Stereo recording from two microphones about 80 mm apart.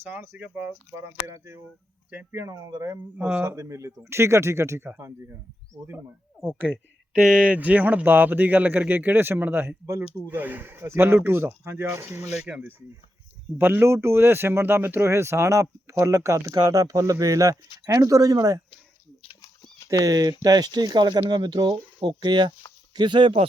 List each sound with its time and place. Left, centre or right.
0.0 s speech: right
0.9 s speech: right
3.2 s speech: centre
3.4 s speech: right
7.1 s speech: centre; by 12.2 s right
12.3 s speech: centre
13.6 s speech: right
19.9 s speech: right